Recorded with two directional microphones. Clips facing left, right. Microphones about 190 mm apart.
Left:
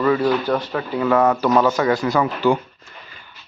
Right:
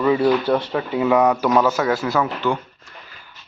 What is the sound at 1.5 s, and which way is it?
Speech, 5° right (ahead or behind).